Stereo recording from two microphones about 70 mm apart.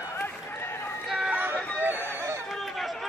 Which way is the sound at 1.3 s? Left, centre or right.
Right.